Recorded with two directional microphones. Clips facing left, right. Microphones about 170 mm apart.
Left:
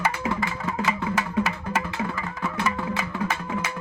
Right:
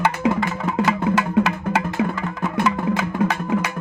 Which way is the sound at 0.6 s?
70° right (ahead or behind).